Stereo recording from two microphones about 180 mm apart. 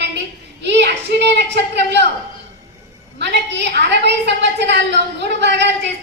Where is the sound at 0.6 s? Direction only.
70° right (ahead or behind).